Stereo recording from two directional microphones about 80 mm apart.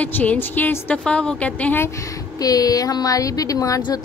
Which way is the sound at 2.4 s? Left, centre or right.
Left.